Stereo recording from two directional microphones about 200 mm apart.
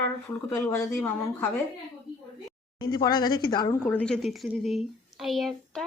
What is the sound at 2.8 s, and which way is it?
Speech, 20° left (ahead or behind).